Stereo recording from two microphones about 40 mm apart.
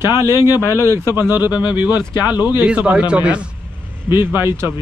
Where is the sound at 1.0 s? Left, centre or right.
Right.